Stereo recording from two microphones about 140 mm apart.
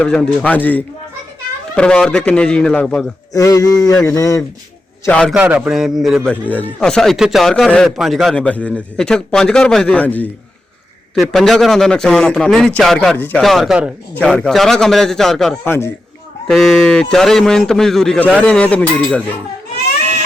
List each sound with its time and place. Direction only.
0.0 s a man's voice: 10° left (ahead or behind)
3.3 s a sound: 25° left (ahead or behind)
5.0 s a man's voice: 10° left (ahead or behind)
5.3 s a man's voice: 10° right (ahead or behind)
13.1 s a man's voice: 10° left (ahead or behind)
13.4 s a man's voice: centre (ahead or behind)
14.1 s a man's voice: 5° left (ahead or behind)
15.6 s a man's voice: 15° left (ahead or behind)
16.5 s a man's voice: centre (ahead or behind)